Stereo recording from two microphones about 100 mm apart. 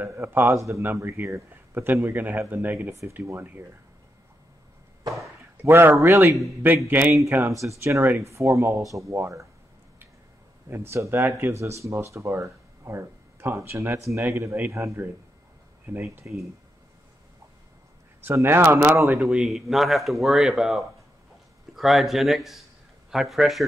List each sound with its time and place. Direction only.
0.0 s speech: 20° right (ahead or behind)
5.6 s a man's voice: 20° right (ahead or behind)
10.7 s speech: 25° right (ahead or behind)
18.2 s speech: 20° right (ahead or behind)
19.1 s speech: 5° right (ahead or behind)